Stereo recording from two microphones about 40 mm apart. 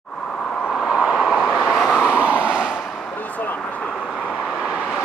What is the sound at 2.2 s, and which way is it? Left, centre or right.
Vehicle, right.